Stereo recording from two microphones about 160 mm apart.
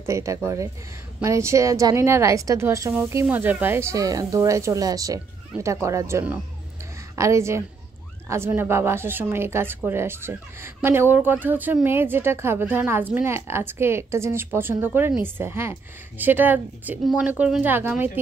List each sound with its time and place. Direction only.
0.0 s a woman's voice: 20° right (ahead or behind)